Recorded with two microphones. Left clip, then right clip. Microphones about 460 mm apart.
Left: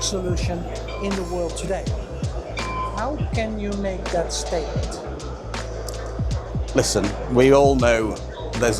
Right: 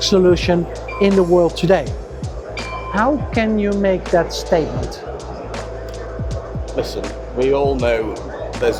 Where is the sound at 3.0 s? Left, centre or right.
Right.